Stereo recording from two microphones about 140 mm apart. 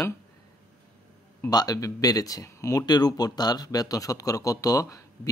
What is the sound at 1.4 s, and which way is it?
Speech, 25° left (ahead or behind).